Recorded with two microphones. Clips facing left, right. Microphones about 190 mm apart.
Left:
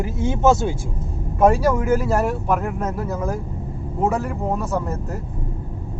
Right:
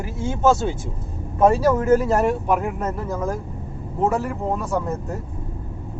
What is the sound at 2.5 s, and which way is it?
Speech, 5° right (ahead or behind).